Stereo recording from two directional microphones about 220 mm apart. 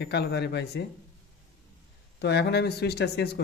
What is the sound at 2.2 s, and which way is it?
Speech, 50° left (ahead or behind).